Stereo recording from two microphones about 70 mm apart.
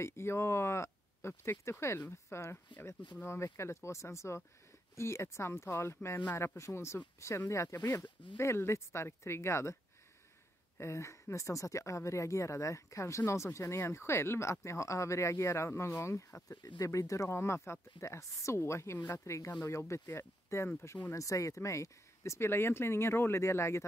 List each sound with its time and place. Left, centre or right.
0.0 s speech: left
10.8 s speech: left